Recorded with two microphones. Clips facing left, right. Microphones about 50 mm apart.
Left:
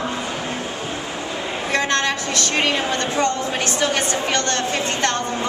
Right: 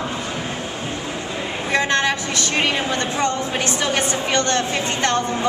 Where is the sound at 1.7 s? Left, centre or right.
Centre.